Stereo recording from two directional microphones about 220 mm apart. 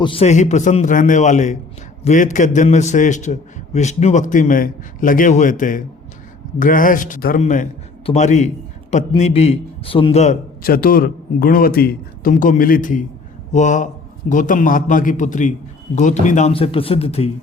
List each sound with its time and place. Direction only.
0.0 s a man's voice: 25° left (ahead or behind)